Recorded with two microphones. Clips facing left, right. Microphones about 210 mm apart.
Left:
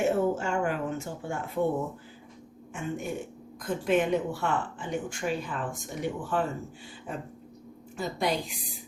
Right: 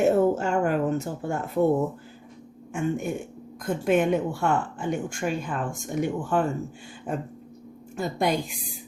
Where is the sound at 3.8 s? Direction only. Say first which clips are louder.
Right 3 dB; 50° right (ahead or behind).